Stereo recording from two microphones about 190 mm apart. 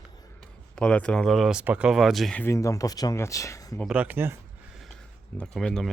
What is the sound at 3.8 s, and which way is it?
Speech, 5° right (ahead or behind).